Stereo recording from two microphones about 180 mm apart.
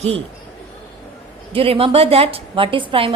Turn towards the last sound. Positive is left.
turn(degrees=-30)  # may be behind; listen again after turning